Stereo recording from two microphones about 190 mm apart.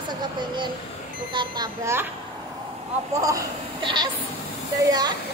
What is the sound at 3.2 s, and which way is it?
Speech, 20° right (ahead or behind).